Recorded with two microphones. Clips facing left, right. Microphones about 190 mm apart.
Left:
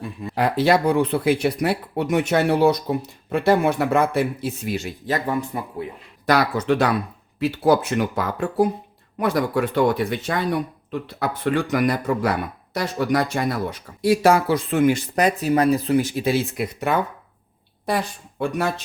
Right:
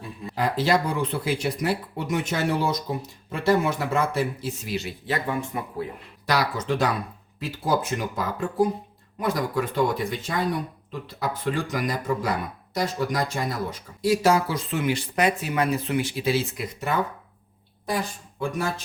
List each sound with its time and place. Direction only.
0.3 s speech: 65° left (ahead or behind); by 5.5 s 40° left (ahead or behind)
6.2 s speech: 60° left (ahead or behind)
7.3 s speech: 70° left (ahead or behind)